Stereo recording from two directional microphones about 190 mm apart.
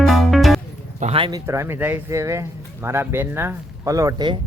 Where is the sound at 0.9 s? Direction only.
35° right (ahead or behind).